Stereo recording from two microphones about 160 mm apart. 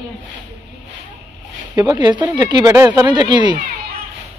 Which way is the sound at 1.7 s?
25° right (ahead or behind).